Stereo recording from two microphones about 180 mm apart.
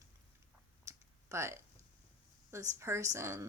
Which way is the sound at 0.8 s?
15° right (ahead or behind).